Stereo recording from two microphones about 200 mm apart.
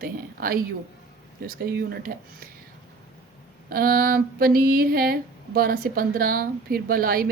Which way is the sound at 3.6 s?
45° right (ahead or behind).